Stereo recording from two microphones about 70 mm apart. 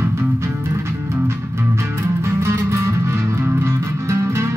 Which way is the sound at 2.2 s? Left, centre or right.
Right.